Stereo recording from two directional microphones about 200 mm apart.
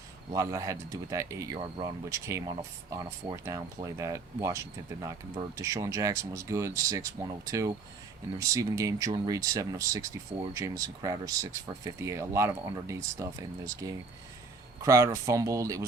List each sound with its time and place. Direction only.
0.3 s speech: 15° right (ahead or behind)